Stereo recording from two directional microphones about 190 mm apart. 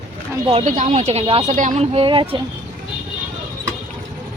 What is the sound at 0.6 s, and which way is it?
Speech, 40° right (ahead or behind).